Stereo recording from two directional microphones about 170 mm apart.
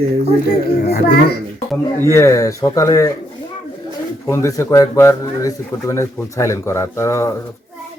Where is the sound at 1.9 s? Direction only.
15° left (ahead or behind).